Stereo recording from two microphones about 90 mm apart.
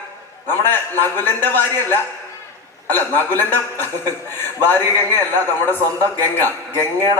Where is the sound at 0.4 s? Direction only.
25° left (ahead or behind).